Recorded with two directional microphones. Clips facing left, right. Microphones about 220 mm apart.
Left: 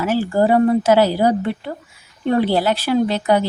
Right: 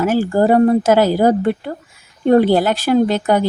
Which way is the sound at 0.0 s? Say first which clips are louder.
Right 3 dB; 45° right (ahead or behind).